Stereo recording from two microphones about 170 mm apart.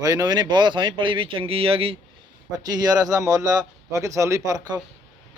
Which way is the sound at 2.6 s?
20° right (ahead or behind).